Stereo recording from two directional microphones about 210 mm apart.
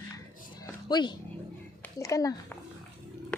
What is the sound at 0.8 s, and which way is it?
A child's voice, 20° left (ahead or behind).